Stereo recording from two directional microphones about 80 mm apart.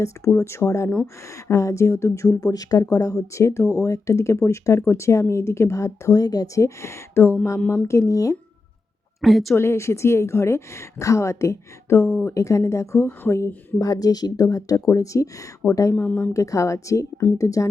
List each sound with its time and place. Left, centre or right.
0.0 s a woman's voice: left
9.2 s a woman's voice: centre
9.6 s a woman's voice: left
13.7 s speech: left
16.0 s speech: left
16.3 s a woman's voice: left